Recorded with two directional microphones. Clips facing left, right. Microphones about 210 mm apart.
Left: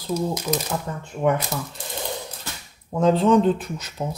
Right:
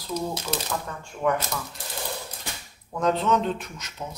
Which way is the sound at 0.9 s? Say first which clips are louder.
Left 5 dB; 20° left (ahead or behind).